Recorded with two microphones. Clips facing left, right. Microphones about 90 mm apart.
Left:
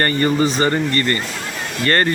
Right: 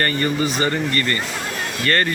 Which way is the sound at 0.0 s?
35° left (ahead or behind).